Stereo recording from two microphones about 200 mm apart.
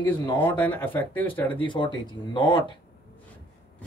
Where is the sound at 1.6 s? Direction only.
25° left (ahead or behind).